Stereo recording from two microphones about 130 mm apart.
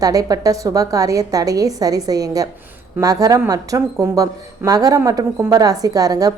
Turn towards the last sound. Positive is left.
turn(degrees=-30)  # may be behind; listen again after turning